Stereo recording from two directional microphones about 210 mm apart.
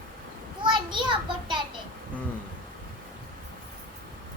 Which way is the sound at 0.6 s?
20° right (ahead or behind).